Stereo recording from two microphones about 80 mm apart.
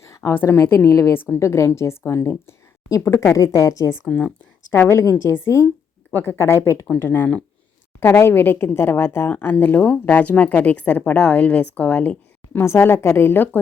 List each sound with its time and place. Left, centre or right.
0.2 s speech: left
0.9 s a woman's voice: left
1.1 s a woman's voice: left
12.5 s a woman's voice: left